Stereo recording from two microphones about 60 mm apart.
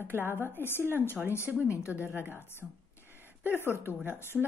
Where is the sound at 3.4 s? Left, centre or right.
Left.